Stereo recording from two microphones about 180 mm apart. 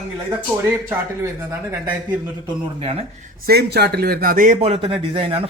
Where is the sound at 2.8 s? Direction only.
35° right (ahead or behind).